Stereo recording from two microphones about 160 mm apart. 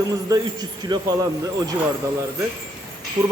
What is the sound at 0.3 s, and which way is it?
Speech, 25° right (ahead or behind).